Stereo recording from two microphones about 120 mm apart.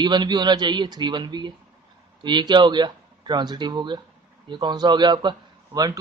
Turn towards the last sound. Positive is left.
turn(degrees=-35)  # may be behind; listen again after turning